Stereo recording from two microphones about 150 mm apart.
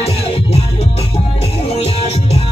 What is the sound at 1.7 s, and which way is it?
Music, 40° left (ahead or behind).